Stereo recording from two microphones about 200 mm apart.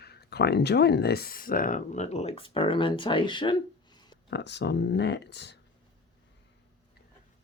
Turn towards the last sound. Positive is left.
turn(degrees=60)  # may be behind; listen again after turning